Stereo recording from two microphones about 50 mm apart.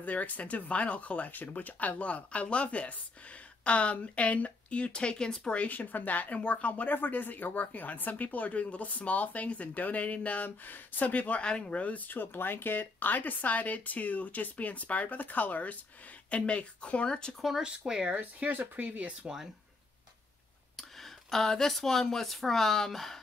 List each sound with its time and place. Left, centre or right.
0.0 s speech: left; by 5.5 s centre
5.5 s speech: left
5.8 s speech: left
12.1 s speech: left
16.3 s speech: left
17.4 s speech: centre
18.1 s speech: right
20.7 s speech: centre